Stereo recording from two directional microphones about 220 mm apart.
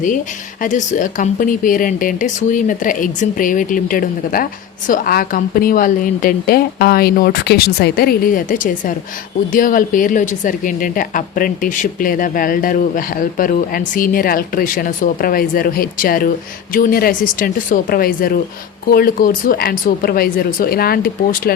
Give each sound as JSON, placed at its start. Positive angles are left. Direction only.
{"t": 0.6, "sound": "a woman's voice", "side_deg": 35}